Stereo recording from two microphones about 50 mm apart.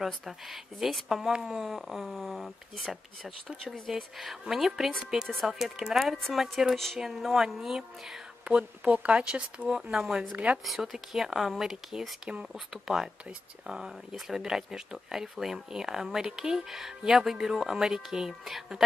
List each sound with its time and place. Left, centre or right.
0.0 s speech: centre
8.5 s speech: right; by 10.2 s centre
10.3 s speech: right
10.6 s speech: centre